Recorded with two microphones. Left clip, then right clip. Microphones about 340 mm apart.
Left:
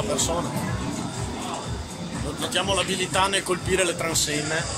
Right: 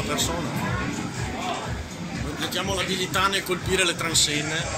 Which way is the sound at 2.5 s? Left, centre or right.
Left.